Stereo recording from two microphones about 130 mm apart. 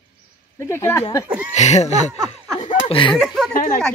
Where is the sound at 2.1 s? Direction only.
30° right (ahead or behind).